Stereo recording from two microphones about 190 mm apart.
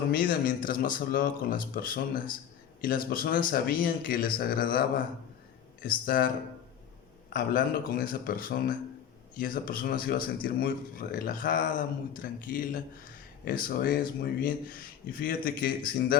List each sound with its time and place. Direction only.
0.1 s speech: 50° left (ahead or behind)
7.3 s speech: 50° left (ahead or behind)